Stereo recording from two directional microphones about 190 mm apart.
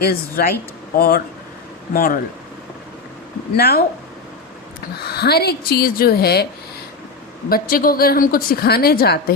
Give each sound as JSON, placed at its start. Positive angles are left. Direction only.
{"t": 0.0, "sound": "a woman's voice", "side_deg": 55}
{"t": 3.5, "sound": "a woman's voice", "side_deg": 55}
{"t": 4.9, "sound": "a woman's voice", "side_deg": 55}
{"t": 7.5, "sound": "a woman's voice", "side_deg": 50}